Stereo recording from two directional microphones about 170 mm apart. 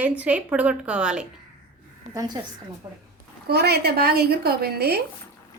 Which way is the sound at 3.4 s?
70° right (ahead or behind).